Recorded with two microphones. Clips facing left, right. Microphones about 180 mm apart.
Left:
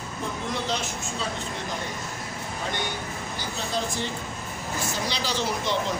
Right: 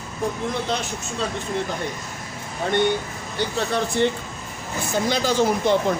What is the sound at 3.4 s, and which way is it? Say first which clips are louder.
Speech: right 8 dB; 65° right (ahead or behind).